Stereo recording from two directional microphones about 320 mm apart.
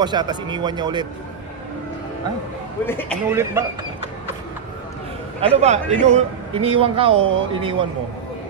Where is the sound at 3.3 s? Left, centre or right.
Centre.